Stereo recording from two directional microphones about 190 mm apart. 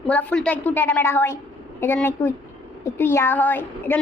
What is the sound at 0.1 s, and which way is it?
A woman's voice, 10° left (ahead or behind).